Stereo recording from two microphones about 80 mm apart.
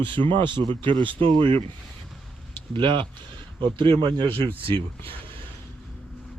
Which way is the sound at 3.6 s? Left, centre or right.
Right.